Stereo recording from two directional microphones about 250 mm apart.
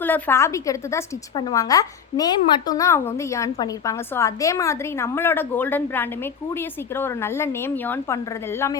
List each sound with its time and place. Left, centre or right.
0.0 s a woman's voice: centre